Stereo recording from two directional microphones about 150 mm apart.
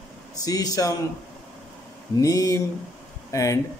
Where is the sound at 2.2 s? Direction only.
20° left (ahead or behind).